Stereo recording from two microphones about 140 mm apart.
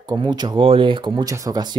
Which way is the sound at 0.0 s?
30° right (ahead or behind).